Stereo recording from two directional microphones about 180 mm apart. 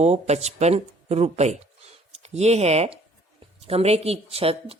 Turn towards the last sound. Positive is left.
turn(degrees=-30)  # may be behind; listen again after turning